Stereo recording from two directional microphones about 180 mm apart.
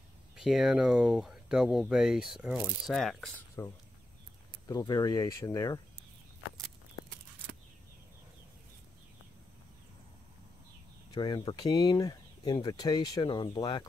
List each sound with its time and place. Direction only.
0.4 s speech: centre (ahead or behind)
4.6 s speech: 20° left (ahead or behind)
11.1 s speech: 25° left (ahead or behind)